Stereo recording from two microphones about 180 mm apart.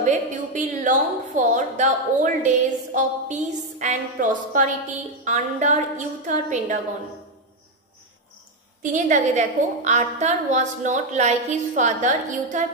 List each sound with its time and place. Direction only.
0.0 s a woman's voice: 45° right (ahead or behind)
8.9 s a woman's voice: 40° right (ahead or behind)